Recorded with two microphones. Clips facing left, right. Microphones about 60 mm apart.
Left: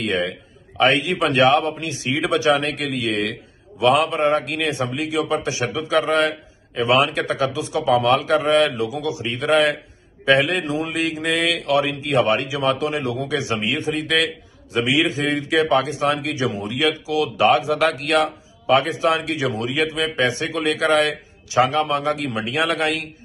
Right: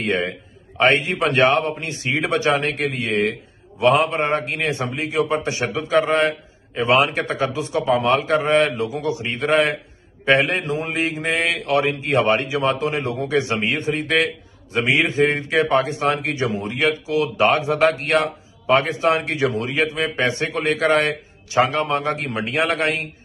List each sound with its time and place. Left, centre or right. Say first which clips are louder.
0.0 s a man's voice: even; right